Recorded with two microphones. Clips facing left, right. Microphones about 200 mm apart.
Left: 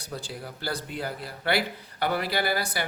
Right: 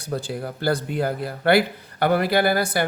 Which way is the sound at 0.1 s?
55° right (ahead or behind).